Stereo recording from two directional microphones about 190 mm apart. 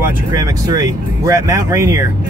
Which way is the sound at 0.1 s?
15° right (ahead or behind).